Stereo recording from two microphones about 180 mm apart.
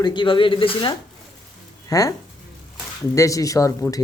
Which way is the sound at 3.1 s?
20° left (ahead or behind).